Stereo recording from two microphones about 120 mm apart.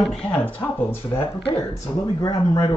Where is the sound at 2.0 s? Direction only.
40° left (ahead or behind).